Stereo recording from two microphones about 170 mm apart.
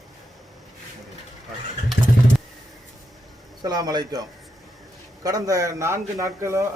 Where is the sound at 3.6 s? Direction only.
25° right (ahead or behind).